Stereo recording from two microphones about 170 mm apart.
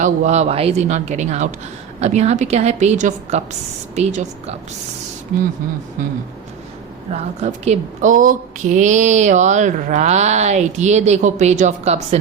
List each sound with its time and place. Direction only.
0.0 s speech: 40° right (ahead or behind)
7.1 s a woman's voice: 40° right (ahead or behind)